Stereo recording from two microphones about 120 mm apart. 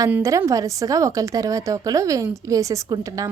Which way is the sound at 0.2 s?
25° right (ahead or behind).